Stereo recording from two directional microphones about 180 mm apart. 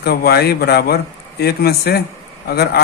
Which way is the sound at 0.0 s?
60° left (ahead or behind).